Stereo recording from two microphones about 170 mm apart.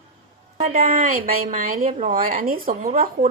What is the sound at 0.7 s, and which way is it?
A woman's voice, 55° right (ahead or behind).